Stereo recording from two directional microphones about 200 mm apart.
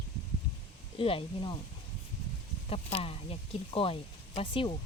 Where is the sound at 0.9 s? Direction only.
25° left (ahead or behind).